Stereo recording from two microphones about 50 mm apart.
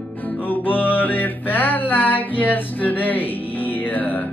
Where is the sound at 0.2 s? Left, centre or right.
Left.